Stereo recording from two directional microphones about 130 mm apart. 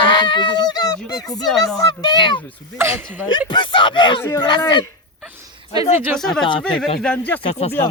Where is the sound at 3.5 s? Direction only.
40° left (ahead or behind).